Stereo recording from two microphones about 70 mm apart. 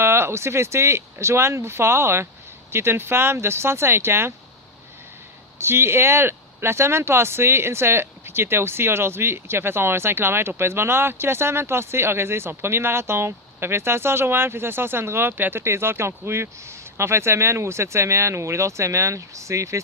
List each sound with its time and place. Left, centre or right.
0.0 s speech: right
5.5 s speech: right